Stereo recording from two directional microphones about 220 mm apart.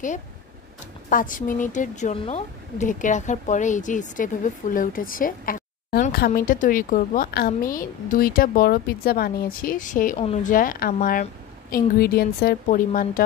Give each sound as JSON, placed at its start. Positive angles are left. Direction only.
{"t": 1.1, "sound": "a woman's voice", "side_deg": 35}